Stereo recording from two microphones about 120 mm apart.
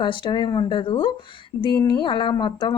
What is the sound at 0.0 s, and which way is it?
A woman's voice, 40° left (ahead or behind).